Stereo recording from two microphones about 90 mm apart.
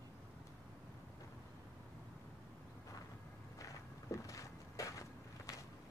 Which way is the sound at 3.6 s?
35° left (ahead or behind).